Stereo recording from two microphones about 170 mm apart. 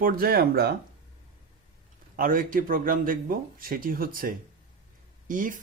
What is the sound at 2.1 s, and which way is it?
A man's voice, 55° right (ahead or behind).